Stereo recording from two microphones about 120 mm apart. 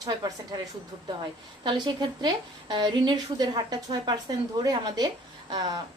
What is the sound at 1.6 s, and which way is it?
A woman's voice, 45° right (ahead or behind).